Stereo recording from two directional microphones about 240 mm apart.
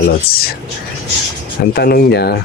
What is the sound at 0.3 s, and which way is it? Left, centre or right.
Speech, left.